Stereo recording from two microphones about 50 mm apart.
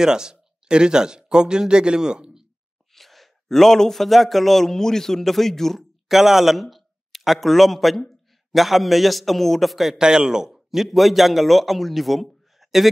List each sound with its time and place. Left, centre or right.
0.0 s speech: centre
2.9 s a man's voice: centre